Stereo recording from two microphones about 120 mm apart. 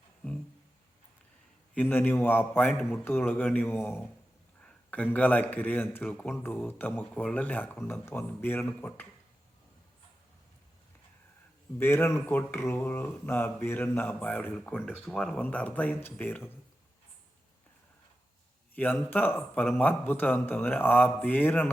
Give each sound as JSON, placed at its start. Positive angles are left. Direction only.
{"t": 1.7, "sound": "a man's voice", "side_deg": 15}
{"t": 4.6, "sound": "a sound", "side_deg": 10}
{"t": 5.1, "sound": "a man's voice", "side_deg": 10}
{"t": 11.8, "sound": "a man's voice", "side_deg": 20}
{"t": 18.7, "sound": "a man's voice", "side_deg": 15}